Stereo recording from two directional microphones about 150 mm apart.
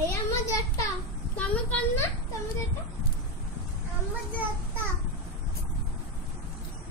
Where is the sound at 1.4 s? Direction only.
10° left (ahead or behind).